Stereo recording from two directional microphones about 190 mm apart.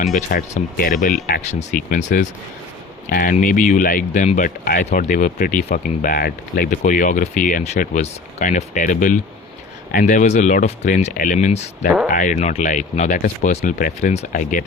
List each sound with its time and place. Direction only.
0.2 s speech: 45° left (ahead or behind)